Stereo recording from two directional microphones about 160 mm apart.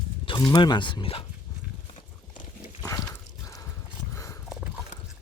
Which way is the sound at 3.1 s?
20° left (ahead or behind).